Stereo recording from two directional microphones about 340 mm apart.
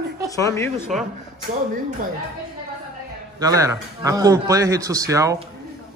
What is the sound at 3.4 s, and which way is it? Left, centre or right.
Speech, centre.